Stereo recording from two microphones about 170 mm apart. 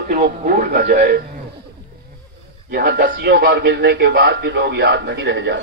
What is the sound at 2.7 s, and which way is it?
A man's voice, 65° right (ahead or behind).